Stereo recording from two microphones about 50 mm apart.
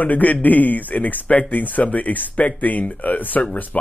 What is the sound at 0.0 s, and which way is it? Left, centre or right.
Speech, left.